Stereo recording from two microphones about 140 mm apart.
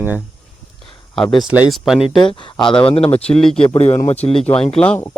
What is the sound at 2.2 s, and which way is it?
Speech, 40° left (ahead or behind).